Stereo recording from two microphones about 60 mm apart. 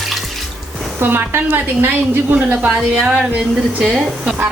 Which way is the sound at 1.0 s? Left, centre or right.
Right.